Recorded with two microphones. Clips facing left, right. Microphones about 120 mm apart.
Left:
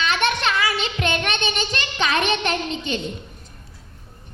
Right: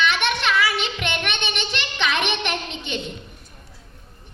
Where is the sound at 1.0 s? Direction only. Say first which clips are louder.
Left 3 dB; 40° left (ahead or behind).